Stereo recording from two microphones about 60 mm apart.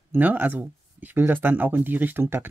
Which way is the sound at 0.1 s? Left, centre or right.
Right.